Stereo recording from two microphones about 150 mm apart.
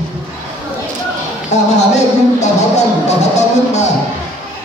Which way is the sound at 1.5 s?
50° left (ahead or behind).